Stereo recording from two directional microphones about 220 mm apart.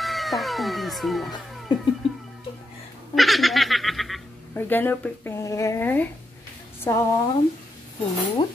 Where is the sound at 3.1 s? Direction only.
Centre (ahead or behind).